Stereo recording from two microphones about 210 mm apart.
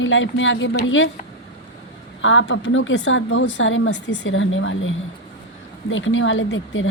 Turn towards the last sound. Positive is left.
turn(degrees=65)  # may be behind; listen again after turning